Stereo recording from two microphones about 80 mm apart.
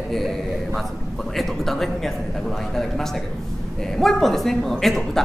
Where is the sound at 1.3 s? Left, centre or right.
Centre.